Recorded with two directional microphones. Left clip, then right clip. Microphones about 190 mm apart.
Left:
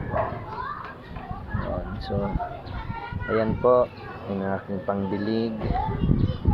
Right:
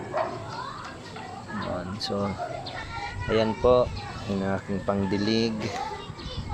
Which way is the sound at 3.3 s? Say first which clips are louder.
Left 1 dB; 10° right (ahead or behind).